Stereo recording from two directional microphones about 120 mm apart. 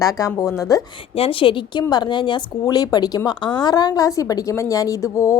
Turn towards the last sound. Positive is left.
turn(degrees=25)  # may be behind; listen again after turning